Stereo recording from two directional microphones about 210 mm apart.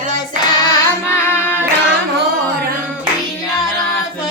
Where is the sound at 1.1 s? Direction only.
10° left (ahead or behind).